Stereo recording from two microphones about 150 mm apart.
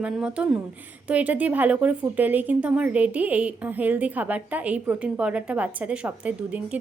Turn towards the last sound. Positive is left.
turn(degrees=-10)  # may be behind; listen again after turning